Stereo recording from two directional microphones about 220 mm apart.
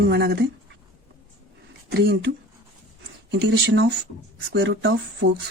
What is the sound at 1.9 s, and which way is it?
Speech, 45° right (ahead or behind).